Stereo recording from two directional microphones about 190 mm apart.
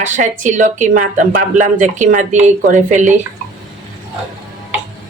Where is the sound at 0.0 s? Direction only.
40° right (ahead or behind).